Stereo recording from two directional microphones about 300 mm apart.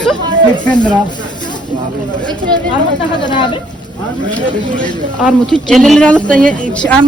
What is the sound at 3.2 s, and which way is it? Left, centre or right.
Speech, centre.